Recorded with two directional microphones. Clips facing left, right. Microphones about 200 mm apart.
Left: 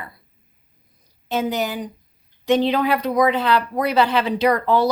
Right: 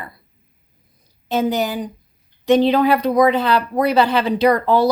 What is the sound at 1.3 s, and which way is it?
Speech, 35° right (ahead or behind).